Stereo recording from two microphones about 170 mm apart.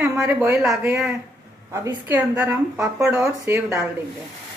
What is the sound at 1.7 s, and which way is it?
A woman's voice, 15° right (ahead or behind).